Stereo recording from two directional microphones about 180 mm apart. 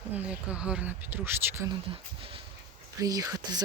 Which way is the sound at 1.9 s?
30° right (ahead or behind).